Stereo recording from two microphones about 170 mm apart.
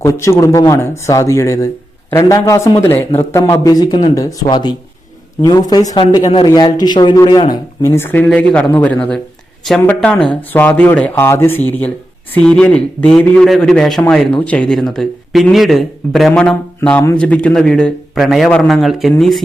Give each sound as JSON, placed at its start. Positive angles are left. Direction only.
{"t": 0.0, "sound": "speech", "side_deg": 15}